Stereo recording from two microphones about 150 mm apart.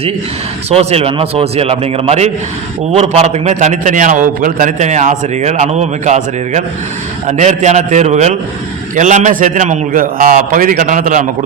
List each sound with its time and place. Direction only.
0.7 s a man's voice: 45° right (ahead or behind); by 11.3 s 60° right (ahead or behind)